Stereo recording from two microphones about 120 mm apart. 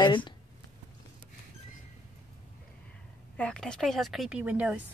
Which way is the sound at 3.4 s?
5° left (ahead or behind).